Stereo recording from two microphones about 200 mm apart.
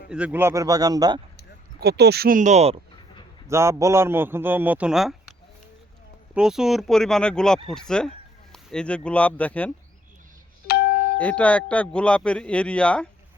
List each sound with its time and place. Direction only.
0.1 s a man's voice: 5° right (ahead or behind)
1.8 s speech: 55° right (ahead or behind); by 2.8 s 30° right (ahead or behind)
3.4 s a man's voice: 15° right (ahead or behind)
6.3 s a man's voice: 5° right (ahead or behind)
10.7 s doorbell: 50° left (ahead or behind)
11.2 s a man's voice: 5° left (ahead or behind)